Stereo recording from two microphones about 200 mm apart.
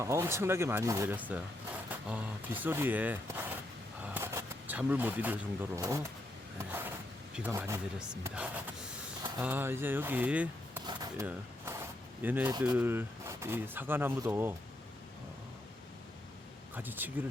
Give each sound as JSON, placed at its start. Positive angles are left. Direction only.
{"t": 0.0, "sound": "speech", "side_deg": -15}
{"t": 4.0, "sound": "a sound", "side_deg": -10}
{"t": 5.8, "sound": "speech", "side_deg": -15}
{"t": 6.6, "sound": "a sound", "side_deg": -10}
{"t": 7.3, "sound": "speech", "side_deg": -10}
{"t": 9.4, "sound": "speech", "side_deg": -10}
{"t": 10.8, "sound": "a sound", "side_deg": -20}
{"t": 12.5, "sound": "speech", "side_deg": -10}
{"t": 16.7, "sound": "speech", "side_deg": -10}